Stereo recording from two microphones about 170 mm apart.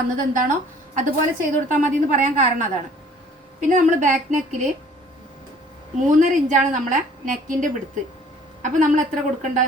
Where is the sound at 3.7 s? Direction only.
50° right (ahead or behind).